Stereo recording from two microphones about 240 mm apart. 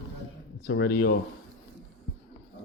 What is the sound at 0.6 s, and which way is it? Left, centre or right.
Speech, left.